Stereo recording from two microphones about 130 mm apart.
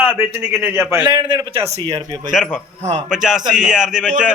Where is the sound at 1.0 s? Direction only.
35° right (ahead or behind).